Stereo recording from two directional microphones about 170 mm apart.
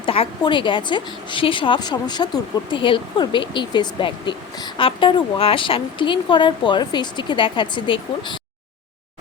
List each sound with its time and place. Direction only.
0.0 s a woman's voice: 30° left (ahead or behind)